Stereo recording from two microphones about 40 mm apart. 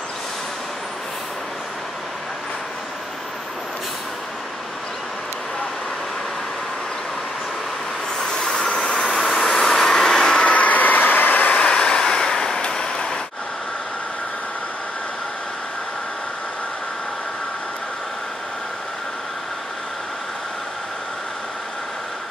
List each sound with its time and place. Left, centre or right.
8.2 s vehicle: left
10.4 s vehicle: left
11.5 s vehicle: left